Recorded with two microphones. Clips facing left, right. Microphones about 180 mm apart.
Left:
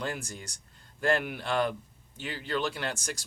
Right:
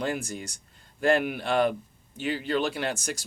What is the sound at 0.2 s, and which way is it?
Speech, 10° right (ahead or behind).